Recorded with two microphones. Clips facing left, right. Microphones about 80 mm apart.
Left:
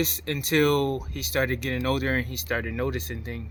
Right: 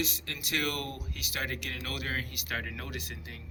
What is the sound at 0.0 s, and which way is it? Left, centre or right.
Speech, left.